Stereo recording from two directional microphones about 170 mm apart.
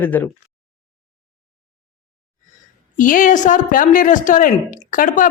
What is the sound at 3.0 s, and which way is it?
A woman's voice, 50° left (ahead or behind).